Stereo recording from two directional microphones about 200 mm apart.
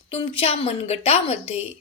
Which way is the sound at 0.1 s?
30° left (ahead or behind).